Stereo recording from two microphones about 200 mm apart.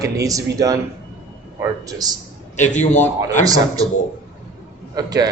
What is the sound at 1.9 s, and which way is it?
Speech, 20° right (ahead or behind).